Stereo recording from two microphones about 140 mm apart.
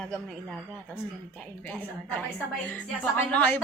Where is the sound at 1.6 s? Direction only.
10° left (ahead or behind).